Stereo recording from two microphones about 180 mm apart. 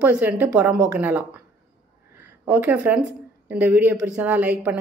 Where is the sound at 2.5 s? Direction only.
10° right (ahead or behind).